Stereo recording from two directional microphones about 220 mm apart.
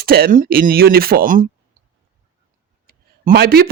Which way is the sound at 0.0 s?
45° right (ahead or behind).